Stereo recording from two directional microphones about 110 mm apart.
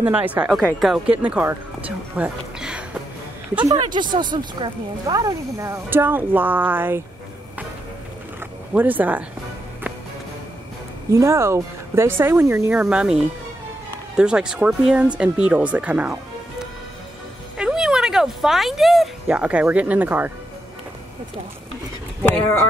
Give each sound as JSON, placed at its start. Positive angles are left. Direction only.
{"t": 0.0, "sound": "speech", "side_deg": -15}
{"t": 0.7, "sound": "speech", "side_deg": 0}
{"t": 1.0, "sound": "speech", "side_deg": -10}
{"t": 3.6, "sound": "speech", "side_deg": -45}
{"t": 8.7, "sound": "speech", "side_deg": -15}
{"t": 11.1, "sound": "speech", "side_deg": -25}
{"t": 12.7, "sound": "speech", "side_deg": -10}
{"t": 17.6, "sound": "a sound", "side_deg": -5}
{"t": 19.2, "sound": "speech", "side_deg": -10}